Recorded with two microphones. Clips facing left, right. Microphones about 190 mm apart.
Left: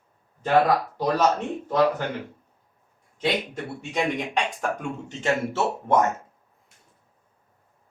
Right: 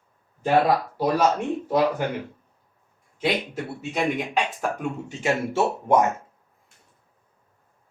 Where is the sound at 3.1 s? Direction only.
5° right (ahead or behind).